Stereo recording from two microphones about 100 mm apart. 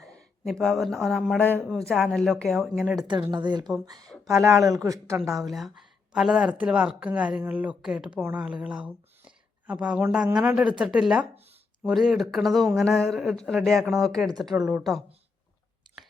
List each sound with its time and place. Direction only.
0.1 s speech: 10° left (ahead or behind)
1.4 s speech: 20° left (ahead or behind)
1.6 s speech: centre (ahead or behind)
3.2 s a woman's voice: 45° right (ahead or behind)
5.5 s a woman's voice: centre (ahead or behind)
8.4 s a sound: 10° right (ahead or behind)
10.3 s a woman's voice: 10° right (ahead or behind)